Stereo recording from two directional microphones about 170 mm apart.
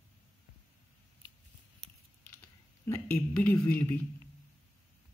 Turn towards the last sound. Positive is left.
turn(degrees=10)  # may be behind; listen again after turning